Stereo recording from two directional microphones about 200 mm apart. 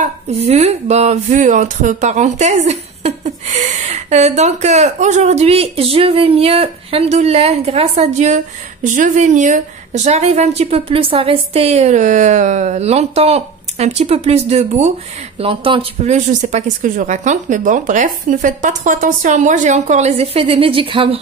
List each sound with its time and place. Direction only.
0.0 s a woman's voice: 30° right (ahead or behind)